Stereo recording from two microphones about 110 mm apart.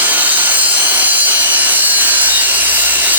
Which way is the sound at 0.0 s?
15° right (ahead or behind).